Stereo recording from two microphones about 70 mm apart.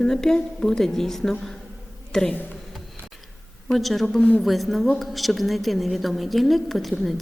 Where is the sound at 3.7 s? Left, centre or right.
Centre.